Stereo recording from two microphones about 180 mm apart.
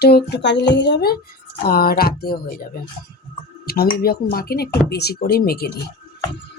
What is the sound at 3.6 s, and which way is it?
Speech, 60° left (ahead or behind).